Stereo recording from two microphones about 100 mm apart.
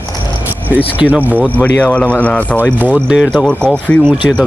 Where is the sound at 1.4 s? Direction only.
15° left (ahead or behind).